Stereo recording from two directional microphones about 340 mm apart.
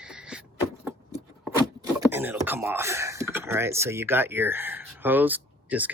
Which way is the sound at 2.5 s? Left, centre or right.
Centre.